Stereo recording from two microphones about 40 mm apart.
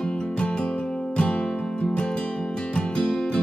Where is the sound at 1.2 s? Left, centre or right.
Left.